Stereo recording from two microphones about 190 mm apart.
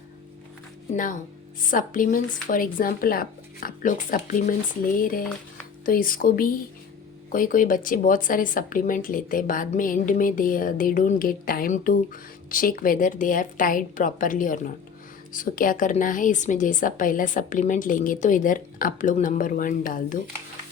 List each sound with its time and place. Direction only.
1.6 s speech: 45° left (ahead or behind)